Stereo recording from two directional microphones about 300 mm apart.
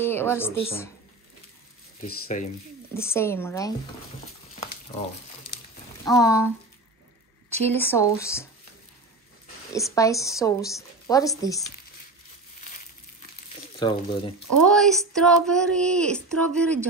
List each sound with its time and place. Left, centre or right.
0.0 s a woman's voice: centre
2.0 s speech: left
2.9 s a woman's voice: centre
6.0 s a woman's voice: centre
7.6 s a woman's voice: centre
9.8 s a woman's voice: centre
13.7 s a woman's voice: centre
14.6 s speech: centre